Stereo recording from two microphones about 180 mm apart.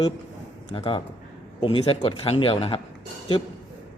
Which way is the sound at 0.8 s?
30° left (ahead or behind).